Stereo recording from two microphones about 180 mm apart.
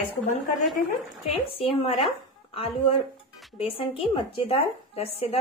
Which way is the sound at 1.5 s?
30° left (ahead or behind).